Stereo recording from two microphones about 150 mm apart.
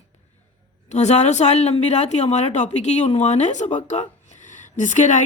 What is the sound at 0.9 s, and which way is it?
A woman's voice, 50° left (ahead or behind).